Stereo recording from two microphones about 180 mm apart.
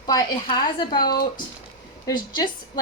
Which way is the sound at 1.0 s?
60° left (ahead or behind).